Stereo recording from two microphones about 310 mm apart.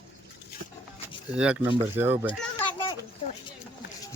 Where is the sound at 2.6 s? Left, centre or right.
Centre.